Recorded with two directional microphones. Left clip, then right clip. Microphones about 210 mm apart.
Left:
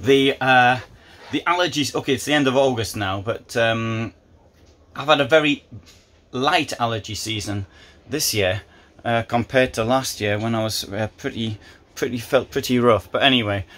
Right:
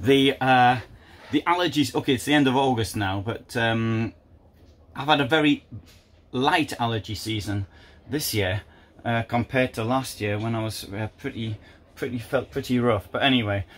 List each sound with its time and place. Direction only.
0.0 s speech: centre (ahead or behind)